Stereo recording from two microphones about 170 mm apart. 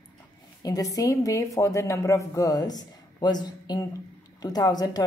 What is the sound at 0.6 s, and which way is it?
A woman's voice, 20° left (ahead or behind).